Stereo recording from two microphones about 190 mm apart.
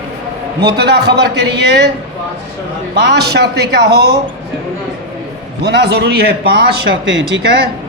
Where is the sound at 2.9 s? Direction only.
60° right (ahead or behind).